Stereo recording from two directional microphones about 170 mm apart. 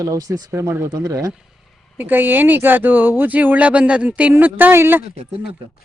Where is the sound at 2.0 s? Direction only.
10° right (ahead or behind).